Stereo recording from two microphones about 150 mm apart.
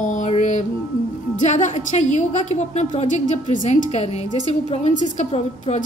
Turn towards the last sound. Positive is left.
turn(degrees=50)  # may be behind; listen again after turning